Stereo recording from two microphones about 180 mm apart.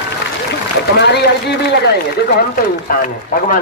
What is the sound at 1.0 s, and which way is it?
Speech, 70° left (ahead or behind).